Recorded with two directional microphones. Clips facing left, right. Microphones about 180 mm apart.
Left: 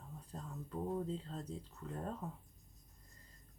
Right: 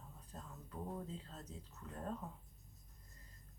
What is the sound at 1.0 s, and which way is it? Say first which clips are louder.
Speech: left 7 dB; 30° left (ahead or behind).